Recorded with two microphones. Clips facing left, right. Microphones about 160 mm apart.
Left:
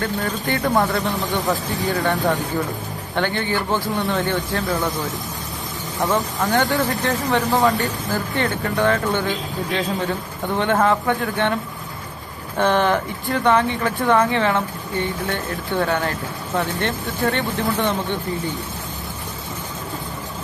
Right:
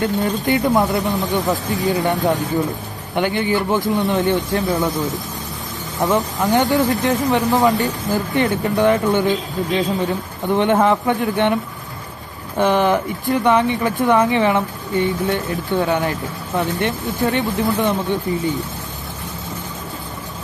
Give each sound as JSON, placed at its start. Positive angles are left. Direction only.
{"t": 0.0, "sound": "speech", "side_deg": -20}
{"t": 6.0, "sound": "speech", "side_deg": -20}
{"t": 12.5, "sound": "speech", "side_deg": -15}